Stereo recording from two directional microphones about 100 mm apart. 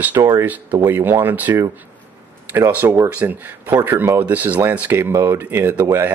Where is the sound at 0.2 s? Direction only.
40° right (ahead or behind).